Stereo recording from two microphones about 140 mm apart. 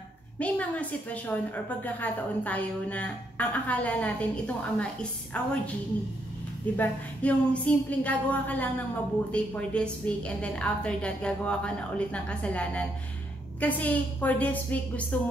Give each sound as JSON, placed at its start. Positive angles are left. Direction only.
{"t": 0.4, "sound": "a woman's voice", "side_deg": 10}
{"t": 5.3, "sound": "a woman's voice", "side_deg": 10}
{"t": 6.8, "sound": "a woman's voice", "side_deg": 10}